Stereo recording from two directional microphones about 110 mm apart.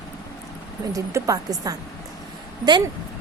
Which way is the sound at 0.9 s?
30° right (ahead or behind).